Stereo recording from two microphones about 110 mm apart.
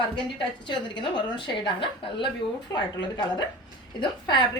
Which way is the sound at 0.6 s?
45° left (ahead or behind).